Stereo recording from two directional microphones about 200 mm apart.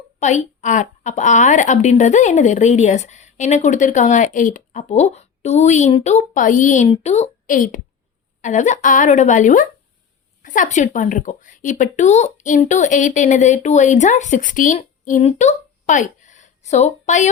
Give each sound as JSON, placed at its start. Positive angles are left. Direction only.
{"t": 0.2, "sound": "a woman's voice", "side_deg": 35}